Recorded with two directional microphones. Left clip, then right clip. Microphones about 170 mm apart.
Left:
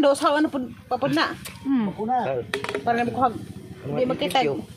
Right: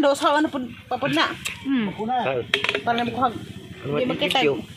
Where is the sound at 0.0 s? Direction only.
5° left (ahead or behind).